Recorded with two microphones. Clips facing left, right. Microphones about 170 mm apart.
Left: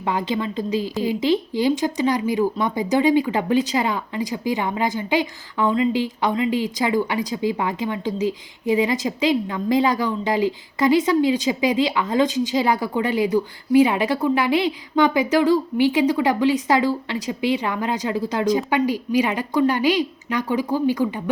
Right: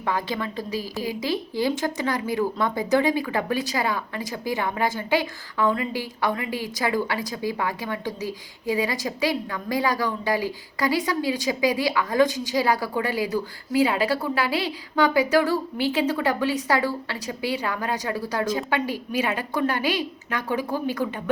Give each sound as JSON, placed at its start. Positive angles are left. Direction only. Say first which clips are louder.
{"t": 0.0, "sound": "a woman's voice", "louder": "left 4 dB", "side_deg": 20}